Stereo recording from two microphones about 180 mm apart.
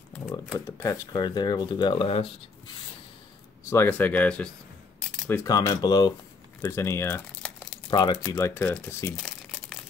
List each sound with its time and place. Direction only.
0.7 s speech: 20° left (ahead or behind)
3.7 s speech: 10° left (ahead or behind)
5.3 s speech: 20° left (ahead or behind)
7.9 s speech: 25° left (ahead or behind); by 9.8 s 5° left (ahead or behind)